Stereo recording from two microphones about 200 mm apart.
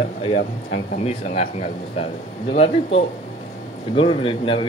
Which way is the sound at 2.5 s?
30° left (ahead or behind).